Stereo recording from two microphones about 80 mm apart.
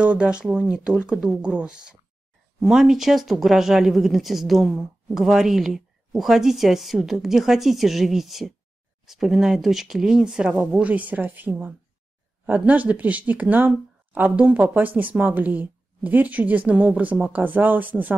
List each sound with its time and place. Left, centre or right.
0.0 s speech: centre